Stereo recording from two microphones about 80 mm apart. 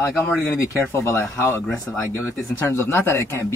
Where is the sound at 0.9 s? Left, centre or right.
Left.